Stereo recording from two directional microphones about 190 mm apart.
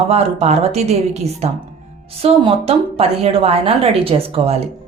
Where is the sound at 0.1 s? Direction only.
35° right (ahead or behind).